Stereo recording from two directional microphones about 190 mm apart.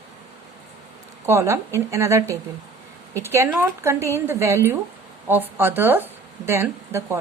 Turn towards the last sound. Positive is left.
turn(degrees=-15)  # may be behind; listen again after turning